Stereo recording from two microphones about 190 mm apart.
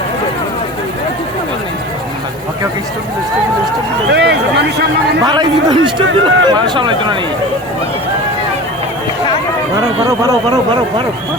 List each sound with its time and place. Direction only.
4.1 s a sound: 65° right (ahead or behind)
5.2 s speech: 20° right (ahead or behind)
9.7 s speech: 15° right (ahead or behind)